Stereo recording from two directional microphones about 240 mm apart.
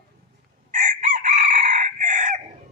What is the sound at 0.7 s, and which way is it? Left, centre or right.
Chicken, right.